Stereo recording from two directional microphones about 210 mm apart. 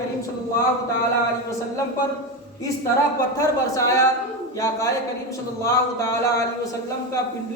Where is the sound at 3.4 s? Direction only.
15° left (ahead or behind).